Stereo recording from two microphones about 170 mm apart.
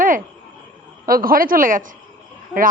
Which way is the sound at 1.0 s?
60° right (ahead or behind).